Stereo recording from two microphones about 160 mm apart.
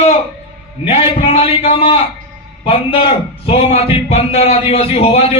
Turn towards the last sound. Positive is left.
turn(degrees=40)  # may be behind; listen again after turning